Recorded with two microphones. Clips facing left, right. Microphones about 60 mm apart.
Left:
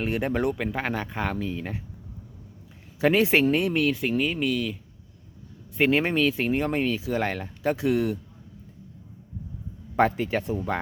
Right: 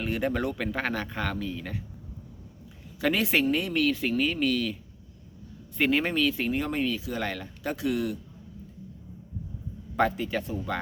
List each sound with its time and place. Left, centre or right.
0.0 s speech: left
0.5 s speech: centre
1.3 s speech: left
3.0 s speech: left
9.9 s speech: left